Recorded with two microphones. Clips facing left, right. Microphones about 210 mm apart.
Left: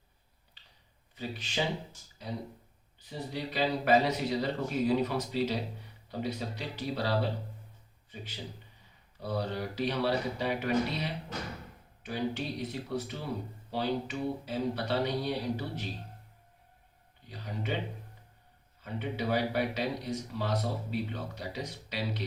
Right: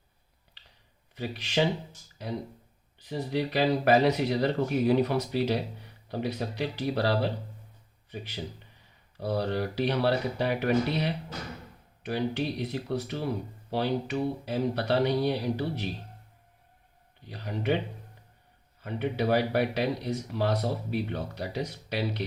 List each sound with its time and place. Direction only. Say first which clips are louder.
1.1 s speech: right 6 dB; 75° right (ahead or behind)
3.0 s speech: right 7 dB; 75° right (ahead or behind)
9.2 s speech: right 5 dB; 65° right (ahead or behind)
17.2 s speech: right 7 dB; 65° right (ahead or behind)
18.8 s speech: right 5 dB; 65° right (ahead or behind)